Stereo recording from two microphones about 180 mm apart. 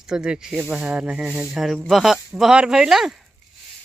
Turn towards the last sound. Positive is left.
turn(degrees=0)  # may be behind; listen again after turning